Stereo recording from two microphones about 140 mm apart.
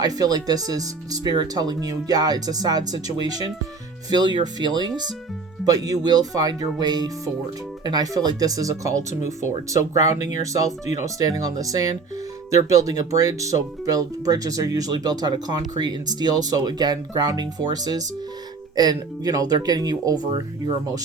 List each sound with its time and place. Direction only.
0.0 s speech: 25° right (ahead or behind)